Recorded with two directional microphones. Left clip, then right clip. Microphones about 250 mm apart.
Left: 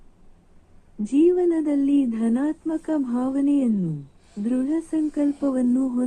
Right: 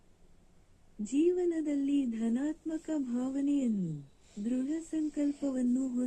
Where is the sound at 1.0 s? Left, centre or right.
Centre.